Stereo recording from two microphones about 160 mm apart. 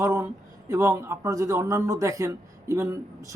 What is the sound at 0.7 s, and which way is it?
Speech, 20° right (ahead or behind).